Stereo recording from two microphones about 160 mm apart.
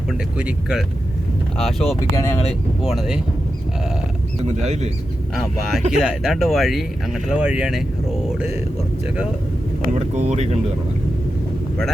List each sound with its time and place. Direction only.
0.1 s speech: 5° right (ahead or behind)
2.1 s speech: 20° left (ahead or behind)
2.8 s speech: centre (ahead or behind)
4.4 s speech: 45° right (ahead or behind)
5.3 s speech: centre (ahead or behind)
9.9 s speech: 45° right (ahead or behind)